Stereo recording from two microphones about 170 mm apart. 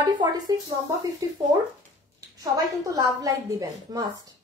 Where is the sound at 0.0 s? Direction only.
25° right (ahead or behind).